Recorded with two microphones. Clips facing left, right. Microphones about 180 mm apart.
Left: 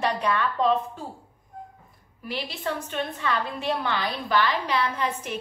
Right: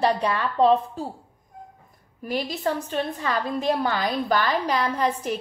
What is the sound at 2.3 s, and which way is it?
A woman's voice, 40° right (ahead or behind).